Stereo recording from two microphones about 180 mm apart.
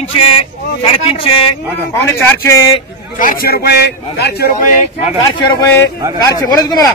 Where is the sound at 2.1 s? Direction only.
15° left (ahead or behind).